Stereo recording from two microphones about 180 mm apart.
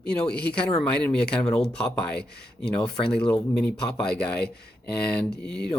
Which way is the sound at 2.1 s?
65° left (ahead or behind).